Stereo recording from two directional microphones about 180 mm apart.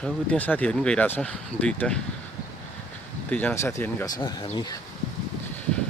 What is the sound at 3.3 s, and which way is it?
Speech, 10° left (ahead or behind).